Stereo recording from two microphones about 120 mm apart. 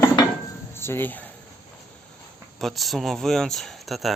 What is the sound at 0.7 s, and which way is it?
Speech, 20° left (ahead or behind).